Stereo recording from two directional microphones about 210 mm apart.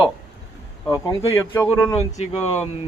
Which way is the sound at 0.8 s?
15° left (ahead or behind).